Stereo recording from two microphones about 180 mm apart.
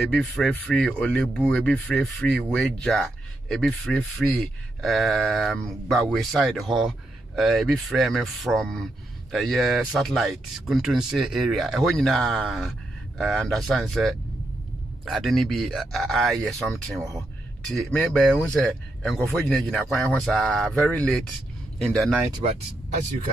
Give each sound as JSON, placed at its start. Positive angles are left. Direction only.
{"t": 0.1, "sound": "speech", "side_deg": 5}